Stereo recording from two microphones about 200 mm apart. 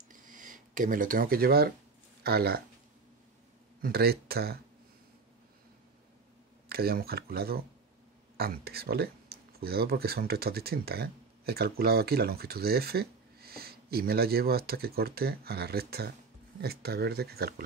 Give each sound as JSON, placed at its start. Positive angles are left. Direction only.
{"t": 0.1, "sound": "a sound", "side_deg": -40}
{"t": 2.2, "sound": "speech", "side_deg": -50}
{"t": 3.8, "sound": "speech", "side_deg": -50}
{"t": 6.7, "sound": "speech", "side_deg": -50}